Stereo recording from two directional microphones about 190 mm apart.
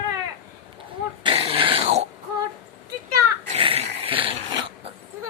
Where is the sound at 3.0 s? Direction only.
35° right (ahead or behind).